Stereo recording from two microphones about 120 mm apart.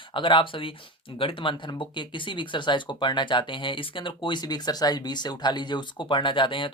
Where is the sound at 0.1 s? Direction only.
45° left (ahead or behind).